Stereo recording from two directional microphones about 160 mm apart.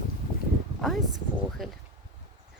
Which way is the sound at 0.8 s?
Centre (ahead or behind).